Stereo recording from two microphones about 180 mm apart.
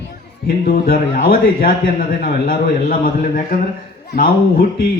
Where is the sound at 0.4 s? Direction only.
60° left (ahead or behind).